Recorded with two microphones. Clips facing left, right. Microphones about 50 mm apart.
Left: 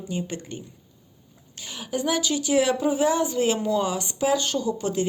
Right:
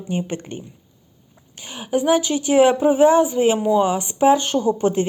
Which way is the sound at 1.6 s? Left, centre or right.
Right.